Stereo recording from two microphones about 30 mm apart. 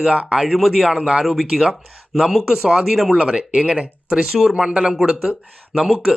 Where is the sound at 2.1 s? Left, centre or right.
Centre.